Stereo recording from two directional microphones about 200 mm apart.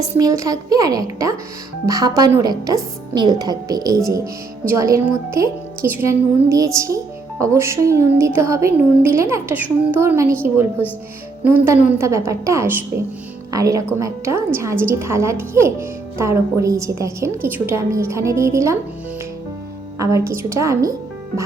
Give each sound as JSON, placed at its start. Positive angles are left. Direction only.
{"t": 0.0, "sound": "a woman's voice", "side_deg": -20}
{"t": 20.0, "sound": "a woman's voice", "side_deg": -15}